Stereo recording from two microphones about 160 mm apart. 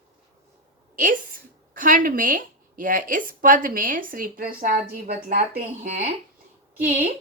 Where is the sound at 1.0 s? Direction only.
60° right (ahead or behind).